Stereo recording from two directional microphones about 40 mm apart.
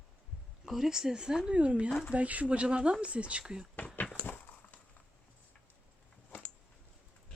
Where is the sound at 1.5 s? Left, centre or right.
Right.